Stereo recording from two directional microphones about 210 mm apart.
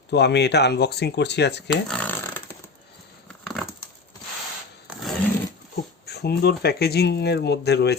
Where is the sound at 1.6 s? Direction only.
5° left (ahead or behind).